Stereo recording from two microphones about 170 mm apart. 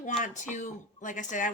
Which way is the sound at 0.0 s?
45° left (ahead or behind).